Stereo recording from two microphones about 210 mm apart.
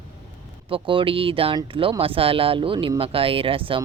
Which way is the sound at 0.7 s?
25° right (ahead or behind).